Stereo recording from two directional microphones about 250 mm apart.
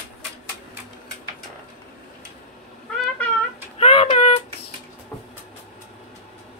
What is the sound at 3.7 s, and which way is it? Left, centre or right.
Child singing, left.